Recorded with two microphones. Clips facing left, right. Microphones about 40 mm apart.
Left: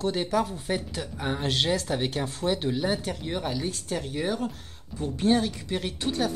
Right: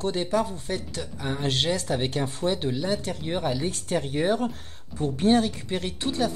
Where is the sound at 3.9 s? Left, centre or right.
Right.